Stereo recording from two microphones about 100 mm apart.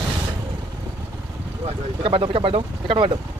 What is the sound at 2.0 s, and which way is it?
Speech, 65° right (ahead or behind).